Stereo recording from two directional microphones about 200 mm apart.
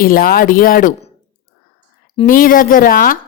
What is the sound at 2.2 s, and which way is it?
Speech, 45° left (ahead or behind).